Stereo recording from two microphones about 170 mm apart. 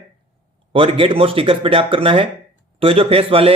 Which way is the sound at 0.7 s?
30° right (ahead or behind).